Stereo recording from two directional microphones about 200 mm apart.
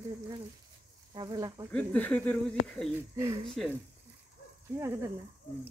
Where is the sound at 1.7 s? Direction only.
5° left (ahead or behind).